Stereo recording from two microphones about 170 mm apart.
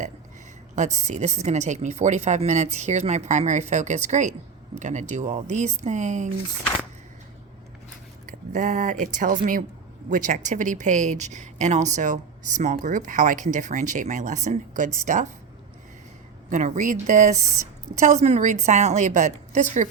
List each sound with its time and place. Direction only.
0.8 s a woman's voice: 45° right (ahead or behind)
8.3 s a woman's voice: 50° right (ahead or behind)
16.5 s a woman's voice: 50° right (ahead or behind)